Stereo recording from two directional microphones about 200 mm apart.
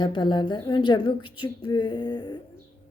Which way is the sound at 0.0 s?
25° left (ahead or behind).